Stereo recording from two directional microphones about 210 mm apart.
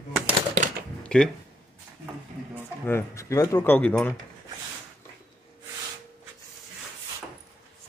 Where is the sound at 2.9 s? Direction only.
10° left (ahead or behind).